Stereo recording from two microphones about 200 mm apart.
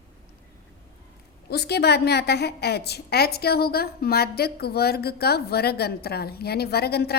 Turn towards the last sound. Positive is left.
turn(degrees=55)  # may be behind; listen again after turning